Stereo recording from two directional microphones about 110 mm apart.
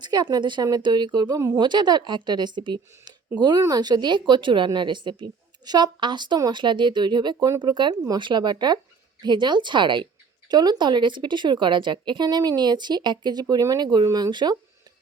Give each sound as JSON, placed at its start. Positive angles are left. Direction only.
{"t": 0.0, "sound": "speech", "side_deg": -40}